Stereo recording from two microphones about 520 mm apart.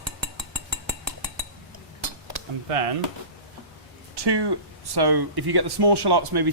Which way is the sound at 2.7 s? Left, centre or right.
Right.